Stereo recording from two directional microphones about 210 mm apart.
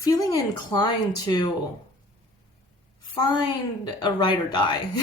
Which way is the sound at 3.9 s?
20° left (ahead or behind).